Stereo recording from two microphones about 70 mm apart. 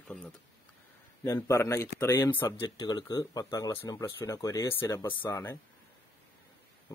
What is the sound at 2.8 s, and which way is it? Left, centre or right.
Speech, left.